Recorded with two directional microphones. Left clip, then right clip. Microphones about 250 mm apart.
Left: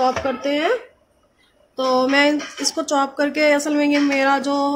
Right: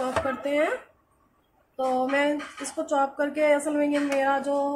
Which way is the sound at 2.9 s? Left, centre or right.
Left.